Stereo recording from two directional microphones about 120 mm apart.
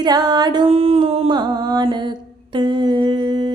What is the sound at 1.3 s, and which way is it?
Music, 40° right (ahead or behind).